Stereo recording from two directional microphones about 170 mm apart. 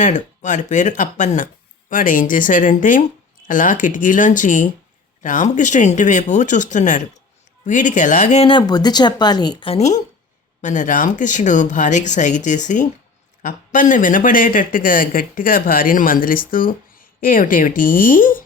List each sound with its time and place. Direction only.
0.0 s speech: 45° left (ahead or behind)